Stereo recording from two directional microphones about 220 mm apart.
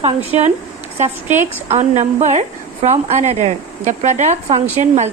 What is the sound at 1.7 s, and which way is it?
A woman's voice, 30° right (ahead or behind).